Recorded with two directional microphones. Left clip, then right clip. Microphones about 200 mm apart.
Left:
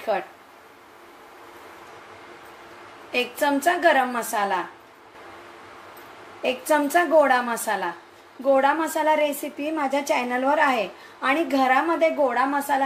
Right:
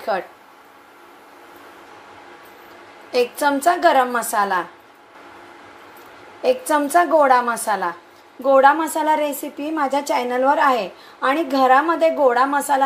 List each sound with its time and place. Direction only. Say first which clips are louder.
3.1 s a woman's voice: right 5 dB; 15° right (ahead or behind)
6.7 s a woman's voice: right 1 dB; 10° right (ahead or behind)